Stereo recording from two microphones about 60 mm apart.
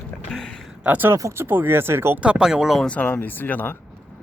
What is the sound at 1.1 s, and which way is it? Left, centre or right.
Speech, right.